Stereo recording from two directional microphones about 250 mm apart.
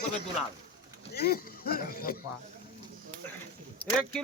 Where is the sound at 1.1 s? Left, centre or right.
Left.